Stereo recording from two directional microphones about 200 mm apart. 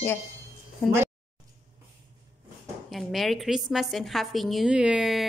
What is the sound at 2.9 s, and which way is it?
A woman's voice, centre (ahead or behind).